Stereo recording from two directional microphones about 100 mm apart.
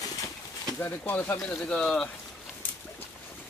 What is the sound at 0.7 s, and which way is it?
Speech, 20° left (ahead or behind).